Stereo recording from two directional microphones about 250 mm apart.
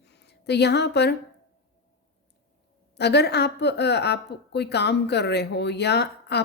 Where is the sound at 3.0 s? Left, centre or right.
Left.